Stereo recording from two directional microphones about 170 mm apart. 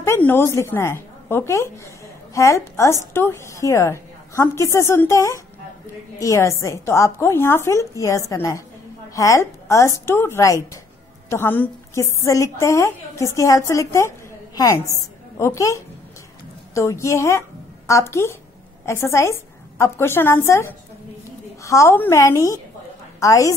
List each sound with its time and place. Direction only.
0.0 s a woman's voice: 15° left (ahead or behind)